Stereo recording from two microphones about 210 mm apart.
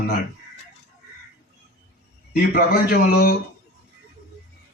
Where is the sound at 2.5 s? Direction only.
45° left (ahead or behind).